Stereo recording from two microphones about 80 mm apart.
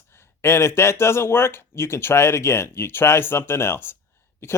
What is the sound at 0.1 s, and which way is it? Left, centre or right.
Speech, left.